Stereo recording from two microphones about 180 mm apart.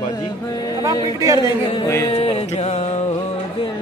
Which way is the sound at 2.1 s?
35° left (ahead or behind).